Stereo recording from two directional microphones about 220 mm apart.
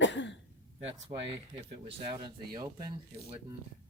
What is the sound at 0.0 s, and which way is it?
Throat clearing, 55° left (ahead or behind).